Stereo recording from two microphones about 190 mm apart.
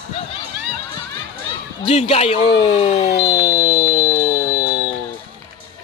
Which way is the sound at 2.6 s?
30° left (ahead or behind).